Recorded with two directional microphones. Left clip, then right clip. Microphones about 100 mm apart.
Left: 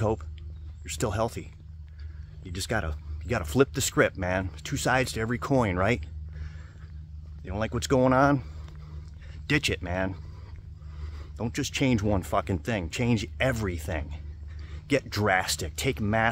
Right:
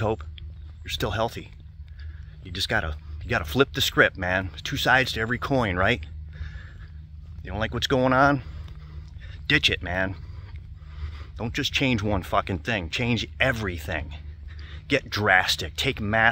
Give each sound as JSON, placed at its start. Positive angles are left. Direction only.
{"t": 0.0, "sound": "speech", "side_deg": 15}
{"t": 11.3, "sound": "speech", "side_deg": 25}
{"t": 14.7, "sound": "a sound", "side_deg": 25}
{"t": 15.2, "sound": "speech", "side_deg": 20}